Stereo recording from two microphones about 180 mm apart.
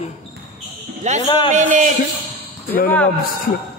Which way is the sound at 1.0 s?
40° right (ahead or behind).